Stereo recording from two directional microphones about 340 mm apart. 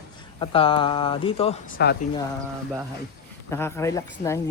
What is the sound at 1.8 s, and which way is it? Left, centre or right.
Speech, left.